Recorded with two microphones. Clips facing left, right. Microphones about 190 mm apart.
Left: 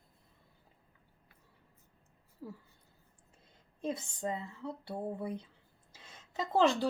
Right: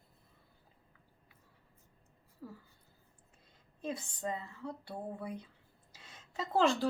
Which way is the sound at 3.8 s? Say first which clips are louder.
Left 2 dB; 25° left (ahead or behind).